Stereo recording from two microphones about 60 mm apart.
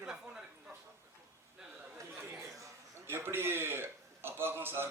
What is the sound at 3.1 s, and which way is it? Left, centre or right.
A man's voice, right.